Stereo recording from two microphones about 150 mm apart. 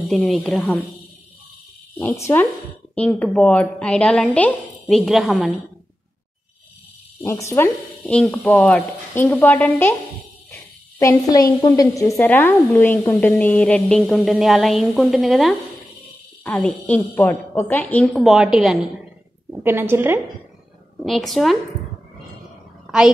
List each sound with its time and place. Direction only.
0.0 s a woman's voice: centre (ahead or behind)
2.0 s a woman's voice: 15° left (ahead or behind); by 5.5 s centre (ahead or behind)
7.2 s speech: 20° left (ahead or behind)
8.0 s speech: 5° left (ahead or behind)
9.1 s a woman's voice: 15° left (ahead or behind); by 15.9 s centre (ahead or behind)
16.4 s a woman's voice: 10° left (ahead or behind)
19.5 s a woman's voice: 15° right (ahead or behind)
21.0 s speech: centre (ahead or behind)